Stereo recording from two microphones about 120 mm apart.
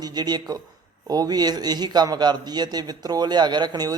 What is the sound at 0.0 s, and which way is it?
A man's voice, 35° right (ahead or behind).